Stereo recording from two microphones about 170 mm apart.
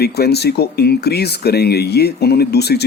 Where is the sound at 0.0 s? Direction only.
70° left (ahead or behind).